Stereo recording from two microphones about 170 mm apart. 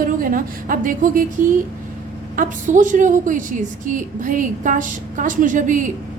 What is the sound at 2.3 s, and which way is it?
A woman's voice, 50° right (ahead or behind).